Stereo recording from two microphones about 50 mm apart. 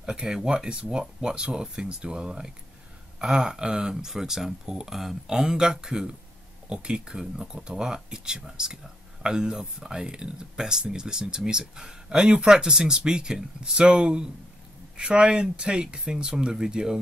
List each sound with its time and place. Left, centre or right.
0.0 s speech: centre